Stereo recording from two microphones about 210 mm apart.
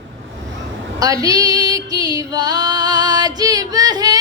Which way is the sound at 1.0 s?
15° right (ahead or behind).